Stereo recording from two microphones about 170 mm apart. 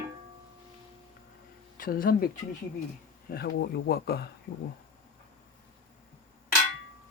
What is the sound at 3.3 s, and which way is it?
Speech, 65° left (ahead or behind).